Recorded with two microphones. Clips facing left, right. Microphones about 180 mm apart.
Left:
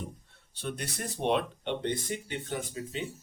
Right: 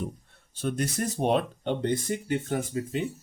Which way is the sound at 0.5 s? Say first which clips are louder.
Right 8 dB; 45° right (ahead or behind).